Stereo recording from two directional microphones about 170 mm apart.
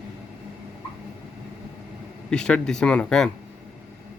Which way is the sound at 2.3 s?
5° left (ahead or behind).